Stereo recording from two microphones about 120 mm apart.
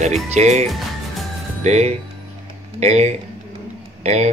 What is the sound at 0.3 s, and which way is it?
Speech, 70° right (ahead or behind).